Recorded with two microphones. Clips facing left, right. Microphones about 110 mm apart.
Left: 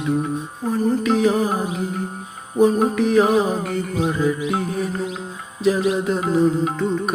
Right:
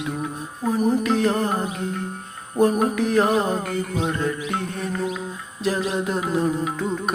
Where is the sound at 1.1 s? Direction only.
Centre (ahead or behind).